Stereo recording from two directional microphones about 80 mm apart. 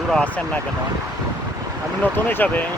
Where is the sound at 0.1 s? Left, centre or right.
Centre.